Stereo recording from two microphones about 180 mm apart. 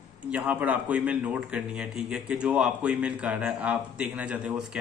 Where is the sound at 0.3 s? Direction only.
10° right (ahead or behind).